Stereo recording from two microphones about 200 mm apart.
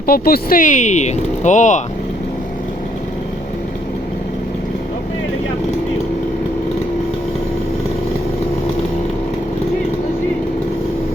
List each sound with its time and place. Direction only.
0.1 s speech: 45° left (ahead or behind)